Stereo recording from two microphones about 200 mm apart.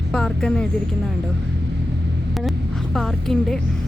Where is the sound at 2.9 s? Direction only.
Centre (ahead or behind).